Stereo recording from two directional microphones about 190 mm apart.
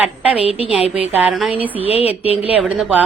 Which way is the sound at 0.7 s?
5° right (ahead or behind).